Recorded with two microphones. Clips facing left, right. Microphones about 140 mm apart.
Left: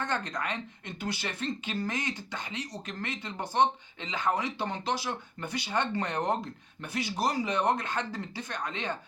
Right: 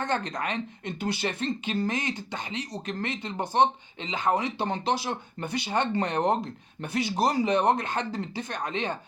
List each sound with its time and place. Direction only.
0.0 s speech: 20° right (ahead or behind)